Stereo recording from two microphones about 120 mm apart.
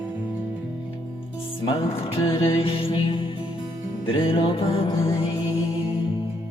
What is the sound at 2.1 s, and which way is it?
Music, 50° left (ahead or behind).